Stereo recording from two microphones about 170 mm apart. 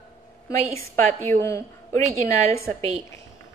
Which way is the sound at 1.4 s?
15° left (ahead or behind).